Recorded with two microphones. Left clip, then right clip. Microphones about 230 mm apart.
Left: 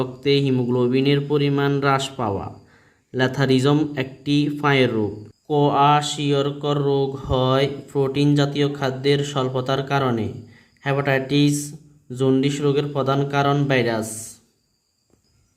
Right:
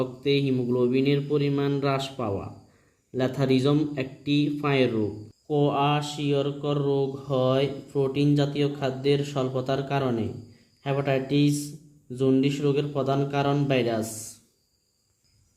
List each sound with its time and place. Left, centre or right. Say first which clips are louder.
0.0 s a man's voice: left 5 dB; left